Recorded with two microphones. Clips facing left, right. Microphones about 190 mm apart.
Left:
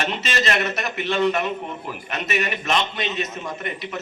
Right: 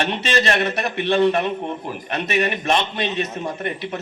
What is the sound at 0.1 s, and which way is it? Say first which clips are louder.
A man's voice: right 4 dB; 35° right (ahead or behind).